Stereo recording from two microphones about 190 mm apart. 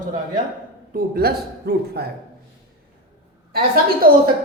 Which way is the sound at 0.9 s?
55° right (ahead or behind).